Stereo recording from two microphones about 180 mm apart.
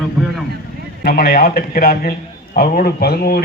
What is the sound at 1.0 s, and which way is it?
A man's voice, 55° left (ahead or behind).